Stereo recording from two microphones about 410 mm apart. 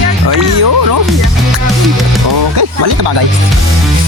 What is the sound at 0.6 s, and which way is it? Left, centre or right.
Speech, right.